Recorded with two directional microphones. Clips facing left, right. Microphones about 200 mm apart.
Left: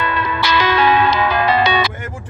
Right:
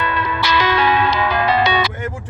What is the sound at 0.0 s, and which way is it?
Music, 70° left (ahead or behind).